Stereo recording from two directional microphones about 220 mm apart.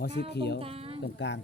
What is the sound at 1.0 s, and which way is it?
Speech, 55° left (ahead or behind).